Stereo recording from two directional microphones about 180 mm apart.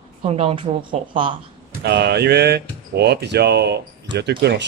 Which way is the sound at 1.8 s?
65° right (ahead or behind).